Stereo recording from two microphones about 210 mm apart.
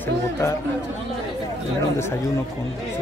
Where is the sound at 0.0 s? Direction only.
15° left (ahead or behind).